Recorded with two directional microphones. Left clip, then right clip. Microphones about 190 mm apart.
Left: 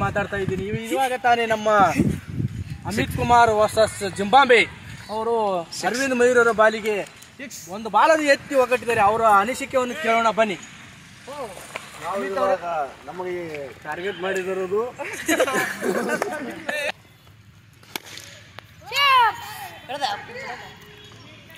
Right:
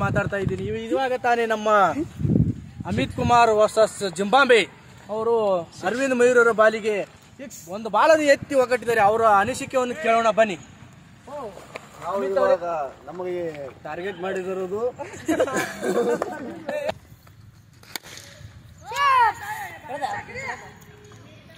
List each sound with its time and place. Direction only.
0.0 s speech: 25° right (ahead or behind)
7.3 s speech: 65° right (ahead or behind)
7.7 s speech: 25° right (ahead or behind)
12.2 s speech: 25° right (ahead or behind)
13.8 s speech: 30° right (ahead or behind)
18.9 s a sound: 5° left (ahead or behind)
19.9 s speech: 10° right (ahead or behind)